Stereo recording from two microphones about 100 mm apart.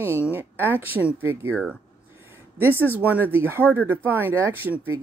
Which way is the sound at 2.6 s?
20° right (ahead or behind).